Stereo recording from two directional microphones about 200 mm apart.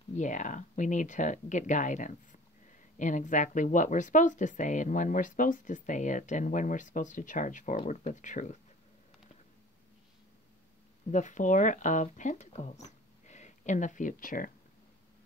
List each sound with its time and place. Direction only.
0.1 s speech: 40° left (ahead or behind)
11.1 s speech: 40° left (ahead or behind)